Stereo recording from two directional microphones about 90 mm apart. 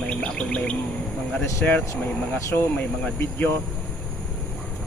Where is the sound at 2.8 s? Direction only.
15° left (ahead or behind).